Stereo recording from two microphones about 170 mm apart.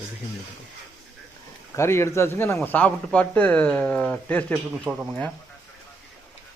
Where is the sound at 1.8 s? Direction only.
15° left (ahead or behind).